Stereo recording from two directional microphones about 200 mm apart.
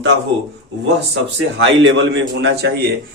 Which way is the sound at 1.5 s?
65° right (ahead or behind).